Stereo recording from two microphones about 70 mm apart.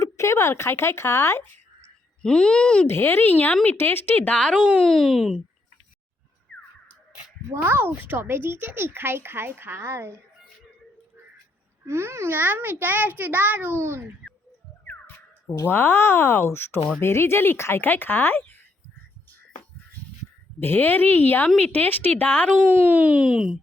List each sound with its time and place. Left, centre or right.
0.0 s speech: left
2.2 s speech: centre
2.8 s speech: left
3.8 s speech: left
4.3 s speech: centre
7.5 s speech: right
11.9 s a child's voice: right
13.7 s speech: right
15.6 s speech: left
20.6 s speech: left
22.8 s speech: right